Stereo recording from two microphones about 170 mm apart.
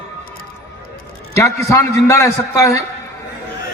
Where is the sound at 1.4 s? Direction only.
15° left (ahead or behind).